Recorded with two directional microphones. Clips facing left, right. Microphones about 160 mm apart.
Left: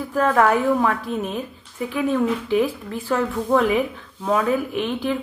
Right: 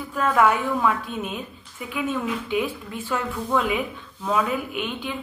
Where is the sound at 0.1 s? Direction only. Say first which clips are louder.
Left 2 dB; 40° left (ahead or behind).